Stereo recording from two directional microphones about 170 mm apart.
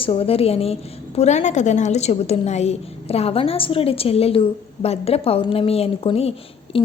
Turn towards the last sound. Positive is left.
turn(degrees=35)  # may be behind; listen again after turning